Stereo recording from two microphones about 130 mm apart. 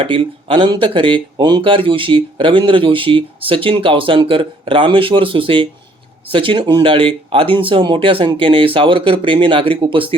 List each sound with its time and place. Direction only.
0.0 s speech: 45° right (ahead or behind)